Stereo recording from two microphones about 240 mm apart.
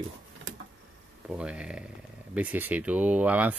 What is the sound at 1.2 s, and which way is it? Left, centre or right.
Speech, centre.